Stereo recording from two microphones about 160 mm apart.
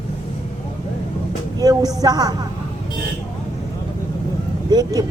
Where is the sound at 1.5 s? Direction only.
25° right (ahead or behind).